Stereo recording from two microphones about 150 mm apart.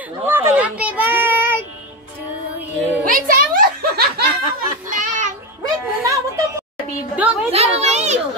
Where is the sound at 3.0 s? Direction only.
65° right (ahead or behind); by 4.2 s 85° right.